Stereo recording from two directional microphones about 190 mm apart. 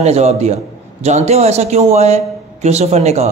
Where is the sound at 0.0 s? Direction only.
35° right (ahead or behind).